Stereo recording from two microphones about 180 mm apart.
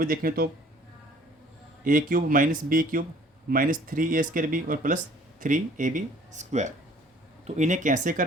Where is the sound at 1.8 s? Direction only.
50° right (ahead or behind).